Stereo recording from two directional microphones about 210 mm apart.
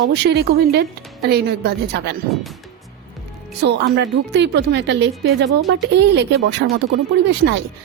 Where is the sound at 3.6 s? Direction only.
55° right (ahead or behind).